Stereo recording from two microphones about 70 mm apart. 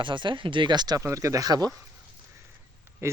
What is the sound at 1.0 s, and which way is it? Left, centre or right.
Speech, right.